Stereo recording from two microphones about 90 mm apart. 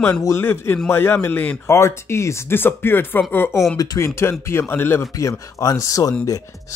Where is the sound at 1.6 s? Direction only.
30° left (ahead or behind).